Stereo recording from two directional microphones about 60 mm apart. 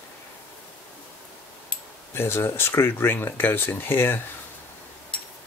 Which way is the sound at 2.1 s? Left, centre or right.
Left.